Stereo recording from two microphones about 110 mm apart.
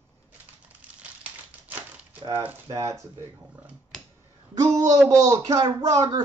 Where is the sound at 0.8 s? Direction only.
10° right (ahead or behind).